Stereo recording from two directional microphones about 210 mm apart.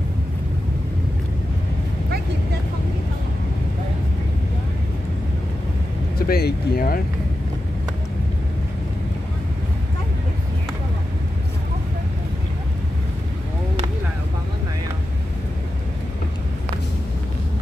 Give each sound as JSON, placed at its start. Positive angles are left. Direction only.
{"t": 6.1, "sound": "speech", "side_deg": 45}